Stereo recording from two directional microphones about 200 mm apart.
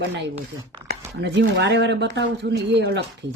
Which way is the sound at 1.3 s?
60° right (ahead or behind).